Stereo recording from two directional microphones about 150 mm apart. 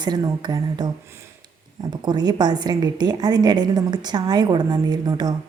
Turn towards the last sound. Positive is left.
turn(degrees=-25)  # may be behind; listen again after turning